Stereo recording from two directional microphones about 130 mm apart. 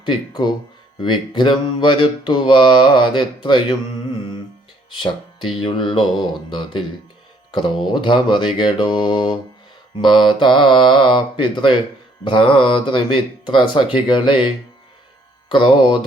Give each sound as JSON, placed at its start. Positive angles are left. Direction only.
{"t": 0.0, "sound": "mantra", "side_deg": 35}
{"t": 4.9, "sound": "speech", "side_deg": 40}
{"t": 5.5, "sound": "mantra", "side_deg": 40}
{"t": 8.0, "sound": "mantra", "side_deg": 40}
{"t": 13.4, "sound": "speech", "side_deg": 35}
{"t": 13.9, "sound": "mantra", "side_deg": 40}